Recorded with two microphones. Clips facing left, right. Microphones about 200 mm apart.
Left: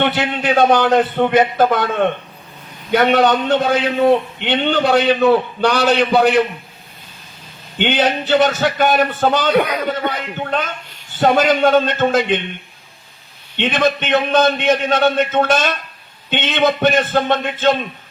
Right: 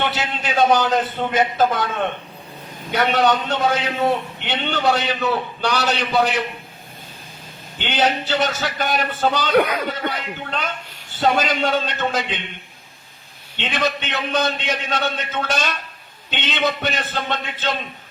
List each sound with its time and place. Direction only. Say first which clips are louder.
0.0 s a man's voice: left 6 dB; 60° left (ahead or behind)
7.8 s a man's voice: left 4 dB; 55° left (ahead or behind)
13.6 s a man's voice: left 6 dB; 55° left (ahead or behind)